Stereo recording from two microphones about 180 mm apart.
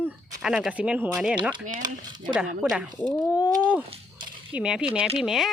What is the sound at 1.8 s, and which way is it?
Speech, 25° right (ahead or behind).